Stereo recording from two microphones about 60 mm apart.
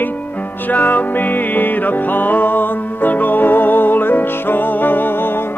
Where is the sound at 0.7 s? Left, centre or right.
Left.